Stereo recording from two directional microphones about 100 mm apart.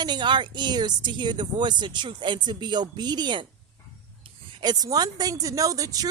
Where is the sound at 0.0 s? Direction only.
50° right (ahead or behind).